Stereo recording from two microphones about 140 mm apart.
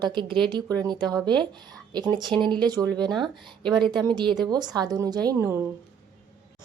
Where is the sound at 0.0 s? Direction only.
35° right (ahead or behind); by 5.6 s 20° right (ahead or behind).